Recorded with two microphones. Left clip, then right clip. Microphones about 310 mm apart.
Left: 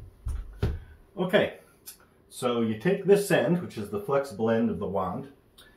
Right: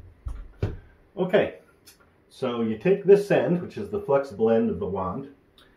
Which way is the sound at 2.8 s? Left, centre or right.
Centre.